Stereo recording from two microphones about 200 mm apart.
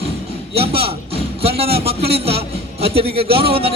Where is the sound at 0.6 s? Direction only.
30° right (ahead or behind).